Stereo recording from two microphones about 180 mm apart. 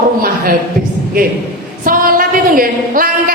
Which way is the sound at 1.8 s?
50° right (ahead or behind).